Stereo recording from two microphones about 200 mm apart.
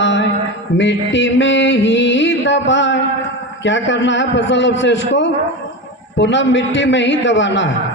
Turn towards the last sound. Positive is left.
turn(degrees=65)  # may be behind; listen again after turning